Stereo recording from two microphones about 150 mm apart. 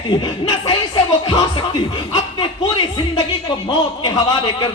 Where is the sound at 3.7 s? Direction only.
30° left (ahead or behind).